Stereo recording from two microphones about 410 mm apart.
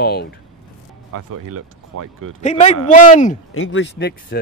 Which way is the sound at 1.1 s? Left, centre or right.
Right.